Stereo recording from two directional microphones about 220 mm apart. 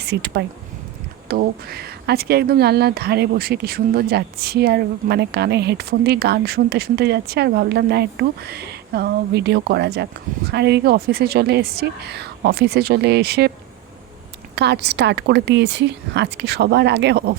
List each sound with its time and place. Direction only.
0.0 s speech: 50° right (ahead or behind)
14.5 s speech: 50° right (ahead or behind)